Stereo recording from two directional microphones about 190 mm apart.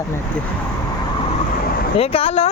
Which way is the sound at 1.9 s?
30° left (ahead or behind).